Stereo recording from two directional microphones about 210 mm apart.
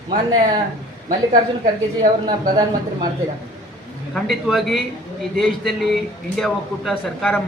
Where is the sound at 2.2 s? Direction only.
20° right (ahead or behind).